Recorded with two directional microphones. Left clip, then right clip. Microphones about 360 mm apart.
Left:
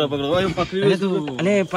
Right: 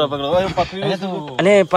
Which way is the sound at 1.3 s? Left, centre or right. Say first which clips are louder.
Right 11 dB; centre.